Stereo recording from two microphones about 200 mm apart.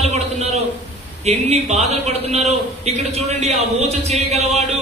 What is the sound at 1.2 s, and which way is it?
A man's voice, 35° right (ahead or behind).